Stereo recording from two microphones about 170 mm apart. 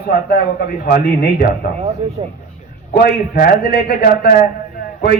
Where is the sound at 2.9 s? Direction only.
65° left (ahead or behind).